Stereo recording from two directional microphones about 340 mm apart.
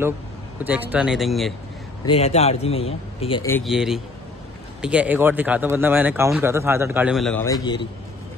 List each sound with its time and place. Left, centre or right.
0.7 s speech: centre
2.0 s speech: centre